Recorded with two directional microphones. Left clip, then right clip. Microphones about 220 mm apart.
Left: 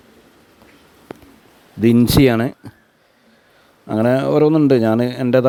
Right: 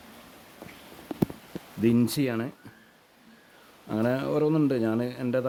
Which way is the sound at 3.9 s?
40° left (ahead or behind).